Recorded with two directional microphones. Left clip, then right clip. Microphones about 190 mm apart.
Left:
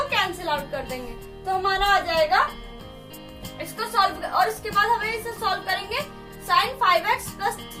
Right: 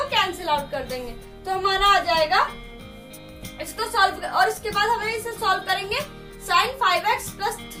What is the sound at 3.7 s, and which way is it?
A woman's voice, 10° right (ahead or behind).